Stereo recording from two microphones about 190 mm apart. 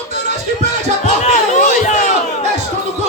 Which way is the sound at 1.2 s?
40° left (ahead or behind).